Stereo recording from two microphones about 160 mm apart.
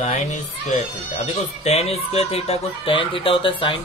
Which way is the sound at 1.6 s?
40° left (ahead or behind).